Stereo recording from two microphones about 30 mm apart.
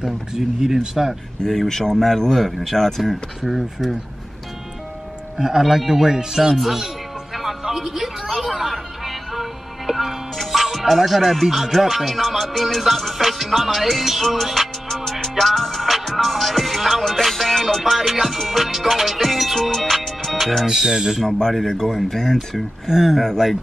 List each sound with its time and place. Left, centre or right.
0.0 s speech: centre
1.7 s speech: centre
3.4 s speech: centre
5.6 s speech: centre
6.5 s speech: centre
7.6 s music: centre
10.3 s speech: centre
20.6 s speech: centre
21.6 s speech: centre
22.8 s speech: centre
23.2 s speech: centre